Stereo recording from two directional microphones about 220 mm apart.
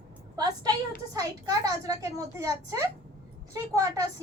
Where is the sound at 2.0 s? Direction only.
15° right (ahead or behind).